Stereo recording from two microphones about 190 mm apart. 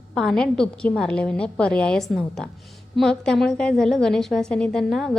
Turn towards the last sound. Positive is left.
turn(degrees=0)  # may be behind; listen again after turning